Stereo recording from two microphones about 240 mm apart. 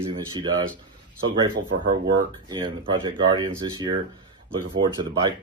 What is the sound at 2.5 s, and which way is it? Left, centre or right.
Speech, centre.